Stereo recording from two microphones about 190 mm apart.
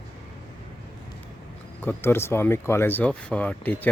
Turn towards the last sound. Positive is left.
turn(degrees=5)  # may be behind; listen again after turning